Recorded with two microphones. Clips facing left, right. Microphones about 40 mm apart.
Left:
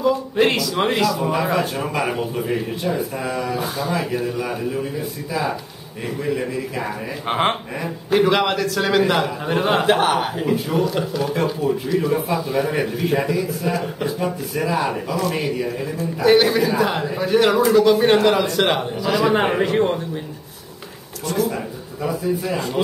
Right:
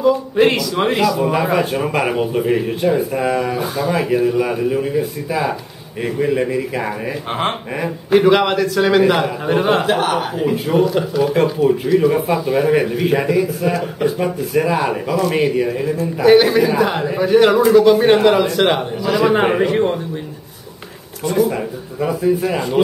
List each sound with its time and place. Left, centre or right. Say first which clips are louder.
0.0 s a man's voice: right 4 dB; centre
1.3 s a man's voice: right 4 dB; centre
3.5 s a man's voice: right 4 dB; centre
4.0 s a man's voice: right 7 dB; centre
7.2 s speech: left 2 dB; centre
8.1 s a man's voice: right 4 dB; centre
10.8 s a man's voice: right 5 dB; centre
12.1 s a man's voice: right 4 dB; right
13.7 s a man's voice: right 5 dB; centre
14.1 s a man's voice: right 6 dB; right
16.0 s a man's voice: right 4 dB; centre
21.2 s speech: right 5 dB; centre
22.2 s speech: right 7 dB; right